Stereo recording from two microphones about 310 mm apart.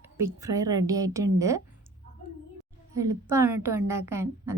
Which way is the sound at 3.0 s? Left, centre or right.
Centre.